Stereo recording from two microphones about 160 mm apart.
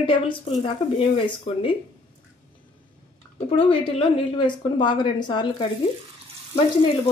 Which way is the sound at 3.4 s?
35° left (ahead or behind).